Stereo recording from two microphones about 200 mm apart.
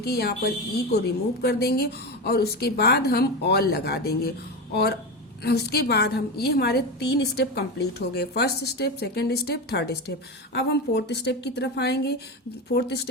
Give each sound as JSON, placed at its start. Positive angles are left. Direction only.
{"t": 0.0, "sound": "a woman's voice", "side_deg": 50}